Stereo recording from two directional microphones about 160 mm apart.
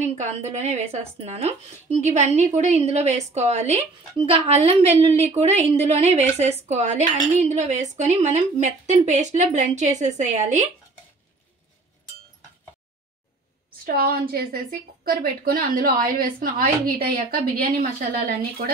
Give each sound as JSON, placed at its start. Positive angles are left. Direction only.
{"t": 0.0, "sound": "a woman's voice", "side_deg": -45}
{"t": 13.8, "sound": "a woman's voice", "side_deg": -70}